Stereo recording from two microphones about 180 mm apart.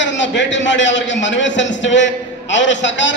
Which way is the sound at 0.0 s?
90° left.